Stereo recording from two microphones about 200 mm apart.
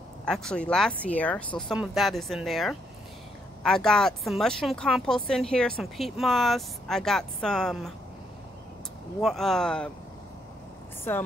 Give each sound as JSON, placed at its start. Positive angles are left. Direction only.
{"t": 0.2, "sound": "speech", "side_deg": 5}
{"t": 9.2, "sound": "speech", "side_deg": 0}
{"t": 11.1, "sound": "speech", "side_deg": 10}